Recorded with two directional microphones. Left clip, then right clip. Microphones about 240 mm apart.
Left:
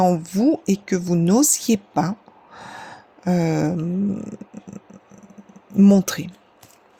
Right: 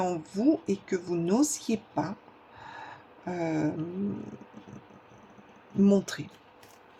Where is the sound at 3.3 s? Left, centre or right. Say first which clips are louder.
Left 8 dB; left.